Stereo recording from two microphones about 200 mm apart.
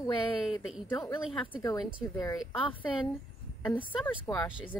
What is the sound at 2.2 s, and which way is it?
Speech, 15° left (ahead or behind).